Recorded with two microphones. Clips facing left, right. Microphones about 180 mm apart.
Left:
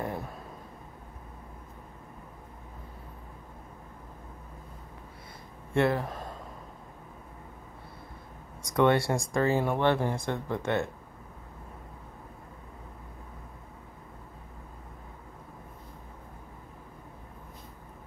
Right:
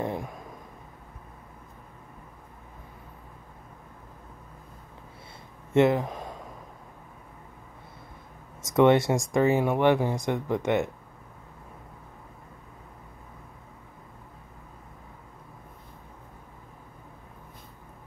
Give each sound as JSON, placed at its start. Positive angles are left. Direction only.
{"t": 0.0, "sound": "a sound", "side_deg": -15}
{"t": 5.7, "sound": "speech", "side_deg": -20}
{"t": 8.6, "sound": "speech", "side_deg": -20}